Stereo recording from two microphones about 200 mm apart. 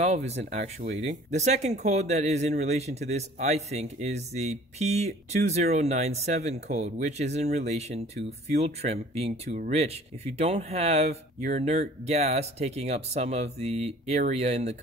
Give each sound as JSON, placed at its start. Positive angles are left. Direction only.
{"t": 0.0, "sound": "speech", "side_deg": -35}